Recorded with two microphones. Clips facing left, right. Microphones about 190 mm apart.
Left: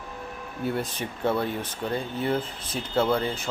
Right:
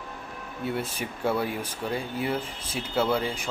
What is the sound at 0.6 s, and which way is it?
A man's voice, 5° right (ahead or behind).